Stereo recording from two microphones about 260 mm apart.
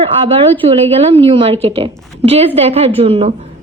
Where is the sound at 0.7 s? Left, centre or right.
Right.